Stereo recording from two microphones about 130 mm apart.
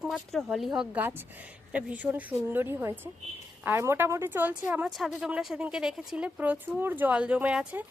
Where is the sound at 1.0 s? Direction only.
15° right (ahead or behind).